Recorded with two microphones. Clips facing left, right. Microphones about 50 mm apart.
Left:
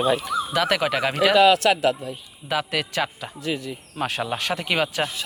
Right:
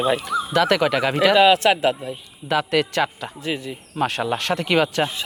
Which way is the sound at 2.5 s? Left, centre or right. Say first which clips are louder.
Right 5 dB; centre.